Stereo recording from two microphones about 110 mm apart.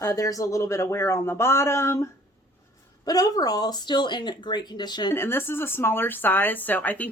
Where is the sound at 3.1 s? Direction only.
35° left (ahead or behind).